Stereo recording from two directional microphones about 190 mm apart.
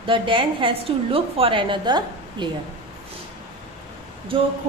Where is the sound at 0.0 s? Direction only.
25° right (ahead or behind).